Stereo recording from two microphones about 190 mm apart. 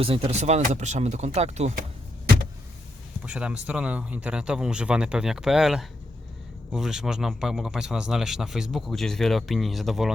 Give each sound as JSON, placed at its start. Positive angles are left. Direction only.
{"t": 0.0, "sound": "speech", "side_deg": -30}
{"t": 3.2, "sound": "speech", "side_deg": -5}